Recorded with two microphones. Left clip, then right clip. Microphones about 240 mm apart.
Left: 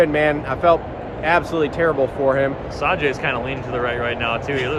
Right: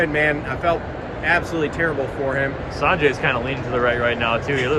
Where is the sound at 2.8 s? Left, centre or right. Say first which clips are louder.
Right 2 dB; centre.